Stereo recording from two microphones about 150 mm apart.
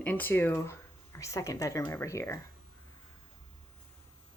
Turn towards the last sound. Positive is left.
turn(degrees=20)  # may be behind; listen again after turning